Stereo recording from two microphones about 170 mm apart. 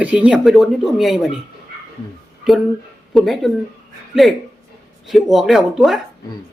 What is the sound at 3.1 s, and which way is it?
Speech, centre (ahead or behind).